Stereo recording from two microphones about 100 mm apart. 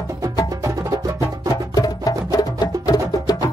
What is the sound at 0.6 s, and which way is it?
Music, 35° right (ahead or behind).